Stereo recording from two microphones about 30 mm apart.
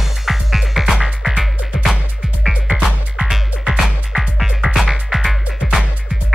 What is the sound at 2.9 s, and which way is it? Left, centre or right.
Music, right.